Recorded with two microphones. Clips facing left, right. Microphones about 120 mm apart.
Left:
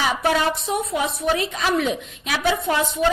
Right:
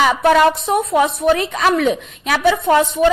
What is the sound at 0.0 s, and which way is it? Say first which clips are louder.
A woman's voice: right 8 dB; 55° right (ahead or behind).